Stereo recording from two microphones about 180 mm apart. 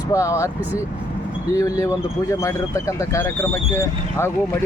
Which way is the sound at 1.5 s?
20° left (ahead or behind).